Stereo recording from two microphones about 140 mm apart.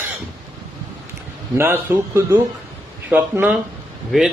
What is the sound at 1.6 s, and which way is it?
A man's voice, 15° right (ahead or behind).